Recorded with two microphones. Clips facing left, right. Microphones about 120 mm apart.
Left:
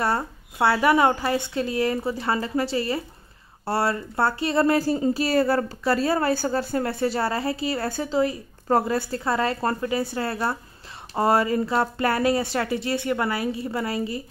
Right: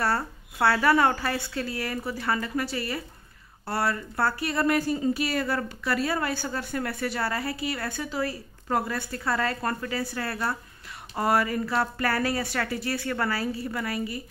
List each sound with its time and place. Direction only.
0.0 s speech: 20° left (ahead or behind)